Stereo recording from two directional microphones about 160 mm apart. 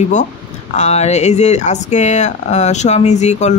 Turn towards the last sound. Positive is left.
turn(degrees=45)  # may be behind; listen again after turning